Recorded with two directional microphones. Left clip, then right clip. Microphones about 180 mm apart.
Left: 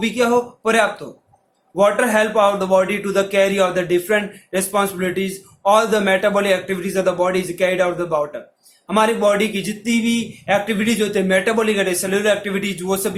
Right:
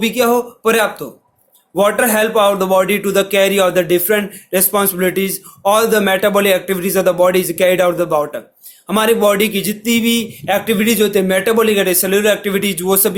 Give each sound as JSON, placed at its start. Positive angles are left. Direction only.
{"t": 0.0, "sound": "a man's voice", "side_deg": -40}